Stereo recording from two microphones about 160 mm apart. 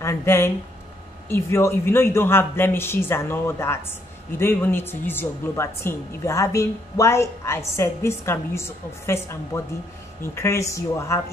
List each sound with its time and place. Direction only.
0.0 s a woman's voice: 15° left (ahead or behind)